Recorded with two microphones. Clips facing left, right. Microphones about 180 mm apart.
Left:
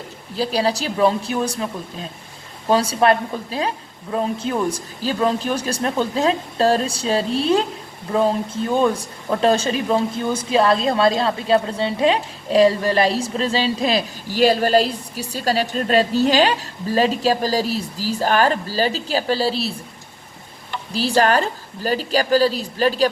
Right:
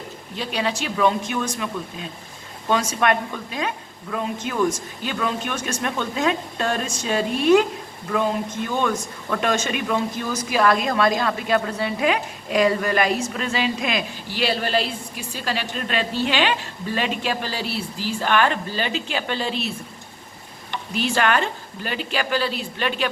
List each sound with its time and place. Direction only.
0.3 s speech: 35° left (ahead or behind)
20.9 s speech: 35° left (ahead or behind)